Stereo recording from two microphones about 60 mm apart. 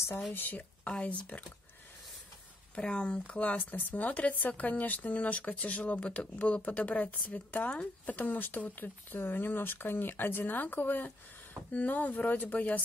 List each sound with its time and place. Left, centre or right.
0.3 s speech: left
2.7 s speech: centre